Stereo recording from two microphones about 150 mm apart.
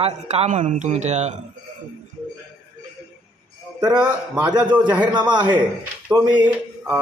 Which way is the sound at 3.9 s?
10° right (ahead or behind).